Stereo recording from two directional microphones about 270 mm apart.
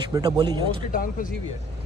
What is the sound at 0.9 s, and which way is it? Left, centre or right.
Speech, left.